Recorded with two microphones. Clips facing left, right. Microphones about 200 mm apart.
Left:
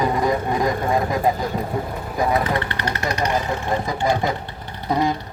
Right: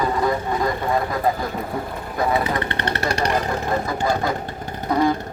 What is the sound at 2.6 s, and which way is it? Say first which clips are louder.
Speech: right 1 dB; 25° right (ahead or behind).